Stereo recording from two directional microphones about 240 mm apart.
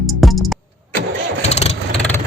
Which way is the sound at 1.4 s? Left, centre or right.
Left.